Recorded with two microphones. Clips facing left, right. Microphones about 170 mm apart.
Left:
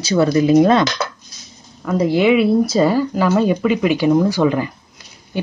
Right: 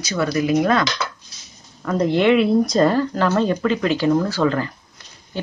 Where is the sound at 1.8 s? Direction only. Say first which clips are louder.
Left 2 dB; 5° left (ahead or behind).